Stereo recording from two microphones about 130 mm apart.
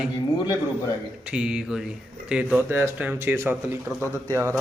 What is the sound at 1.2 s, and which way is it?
A man's voice, 5° right (ahead or behind).